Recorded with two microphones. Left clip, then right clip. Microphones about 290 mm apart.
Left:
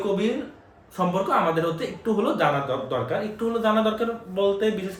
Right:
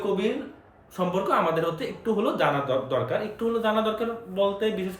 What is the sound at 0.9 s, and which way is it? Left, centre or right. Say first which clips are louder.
Speech: left 2 dB; centre.